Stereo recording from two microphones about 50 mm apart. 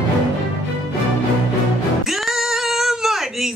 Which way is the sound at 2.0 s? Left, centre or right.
Centre.